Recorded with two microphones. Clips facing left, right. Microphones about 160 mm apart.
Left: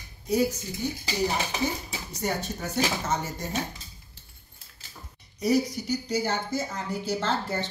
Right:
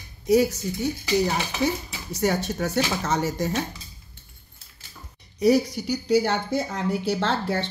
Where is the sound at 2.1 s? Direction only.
90° right.